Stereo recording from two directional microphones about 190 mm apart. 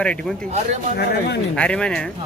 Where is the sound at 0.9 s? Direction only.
60° left (ahead or behind).